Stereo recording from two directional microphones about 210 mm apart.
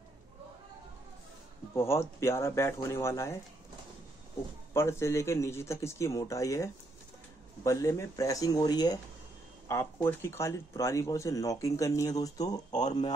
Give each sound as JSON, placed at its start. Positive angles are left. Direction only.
{"t": 1.8, "sound": "speech", "side_deg": 10}
{"t": 4.7, "sound": "speech", "side_deg": 15}